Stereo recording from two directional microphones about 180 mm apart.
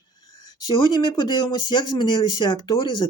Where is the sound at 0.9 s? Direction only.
25° left (ahead or behind).